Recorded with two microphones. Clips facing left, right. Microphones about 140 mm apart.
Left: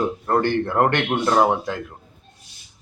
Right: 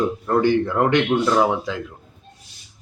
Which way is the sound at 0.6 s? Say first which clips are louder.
Right 1 dB; 55° left (ahead or behind).